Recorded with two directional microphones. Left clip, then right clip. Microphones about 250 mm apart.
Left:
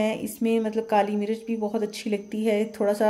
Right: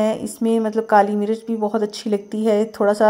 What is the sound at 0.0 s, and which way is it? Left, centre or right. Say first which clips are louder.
A woman's voice: right 6 dB; centre.